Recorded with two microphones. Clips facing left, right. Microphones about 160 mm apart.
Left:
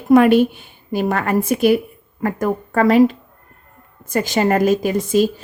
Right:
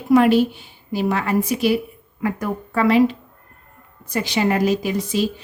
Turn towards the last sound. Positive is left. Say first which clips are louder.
# left 5 dB
turn(degrees=50)  # may be behind; listen again after turning